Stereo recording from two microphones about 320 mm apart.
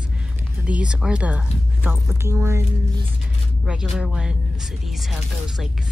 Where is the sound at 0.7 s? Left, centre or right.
Centre.